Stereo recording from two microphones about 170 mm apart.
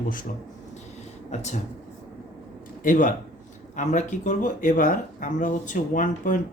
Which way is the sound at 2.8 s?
50° left (ahead or behind).